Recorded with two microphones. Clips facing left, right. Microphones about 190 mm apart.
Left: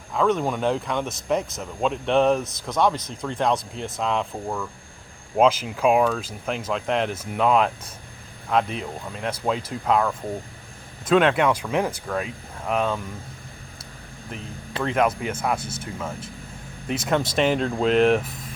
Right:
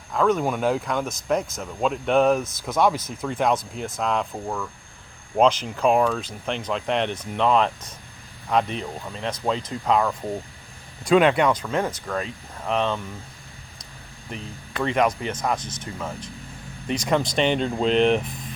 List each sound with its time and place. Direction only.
0.1 s speech: centre (ahead or behind)
14.8 s speech: centre (ahead or behind)